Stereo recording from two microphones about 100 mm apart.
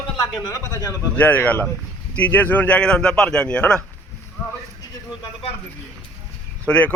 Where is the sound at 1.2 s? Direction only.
15° left (ahead or behind).